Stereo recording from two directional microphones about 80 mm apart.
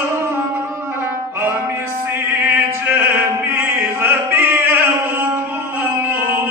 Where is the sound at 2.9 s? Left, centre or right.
Right.